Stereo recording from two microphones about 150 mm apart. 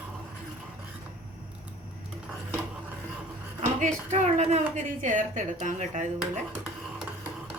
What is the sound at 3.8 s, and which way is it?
A woman's voice, 50° right (ahead or behind).